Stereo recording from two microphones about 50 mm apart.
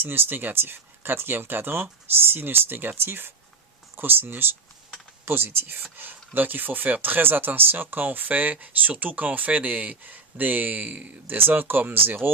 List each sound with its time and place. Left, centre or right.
0.0 s speech: right
11.3 s speech: right